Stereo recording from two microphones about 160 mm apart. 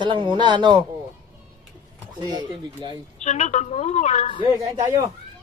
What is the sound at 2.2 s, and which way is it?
Speech, 25° right (ahead or behind).